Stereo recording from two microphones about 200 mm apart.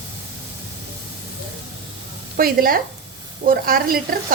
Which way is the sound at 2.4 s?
45° right (ahead or behind).